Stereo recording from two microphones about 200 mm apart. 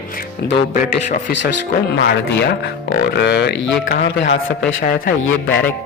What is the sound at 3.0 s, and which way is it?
Speech, 55° left (ahead or behind).